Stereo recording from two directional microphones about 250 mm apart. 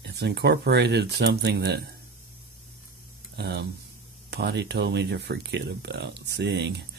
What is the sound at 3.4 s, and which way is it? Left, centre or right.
Speech, right.